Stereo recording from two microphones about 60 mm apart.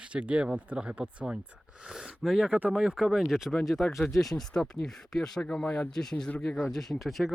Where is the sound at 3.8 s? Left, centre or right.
Centre.